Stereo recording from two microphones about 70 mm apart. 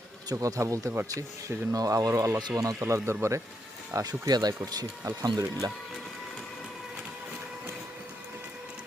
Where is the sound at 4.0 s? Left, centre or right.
Right.